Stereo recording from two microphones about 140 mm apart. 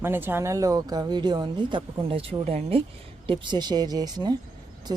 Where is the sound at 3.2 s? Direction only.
35° right (ahead or behind).